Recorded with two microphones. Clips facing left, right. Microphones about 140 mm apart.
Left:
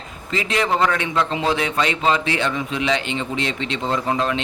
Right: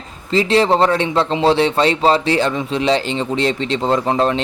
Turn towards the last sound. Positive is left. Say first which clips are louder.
# right 5 dB
turn(degrees=-35)  # may be behind; listen again after turning